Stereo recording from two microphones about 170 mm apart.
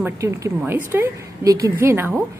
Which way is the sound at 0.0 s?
15° right (ahead or behind).